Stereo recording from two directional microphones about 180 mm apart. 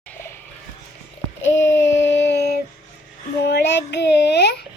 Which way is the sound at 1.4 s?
90° left.